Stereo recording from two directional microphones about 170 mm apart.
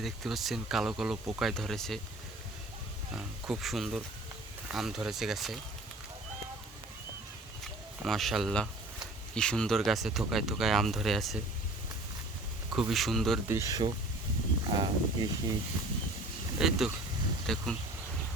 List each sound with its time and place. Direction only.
0.0 s speech: centre (ahead or behind)
3.1 s speech: 5° right (ahead or behind)
7.6 s a sound: centre (ahead or behind)
9.3 s speech: 5° left (ahead or behind)
12.7 s speech: centre (ahead or behind)
13.5 s speech: 20° right (ahead or behind)
16.6 s speech: centre (ahead or behind)